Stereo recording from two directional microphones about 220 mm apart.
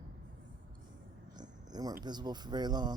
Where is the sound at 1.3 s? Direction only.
20° right (ahead or behind).